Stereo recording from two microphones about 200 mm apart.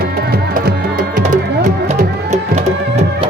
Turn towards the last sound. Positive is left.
turn(degrees=-35)  # may be behind; listen again after turning